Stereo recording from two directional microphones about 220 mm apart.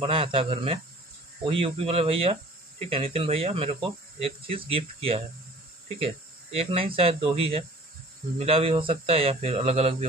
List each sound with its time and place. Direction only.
0.0 s speech: 25° right (ahead or behind)